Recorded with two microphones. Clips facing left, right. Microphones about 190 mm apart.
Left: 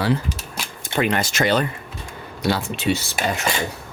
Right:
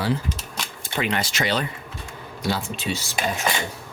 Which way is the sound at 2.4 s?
65° left (ahead or behind).